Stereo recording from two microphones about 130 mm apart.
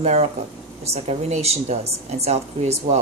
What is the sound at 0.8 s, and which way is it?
Speech, 55° right (ahead or behind).